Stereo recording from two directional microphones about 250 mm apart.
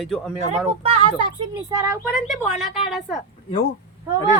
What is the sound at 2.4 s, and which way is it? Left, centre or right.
Speech, left.